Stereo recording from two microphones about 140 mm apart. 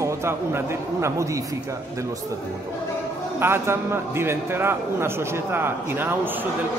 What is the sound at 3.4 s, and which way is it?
A man's voice, 20° right (ahead or behind).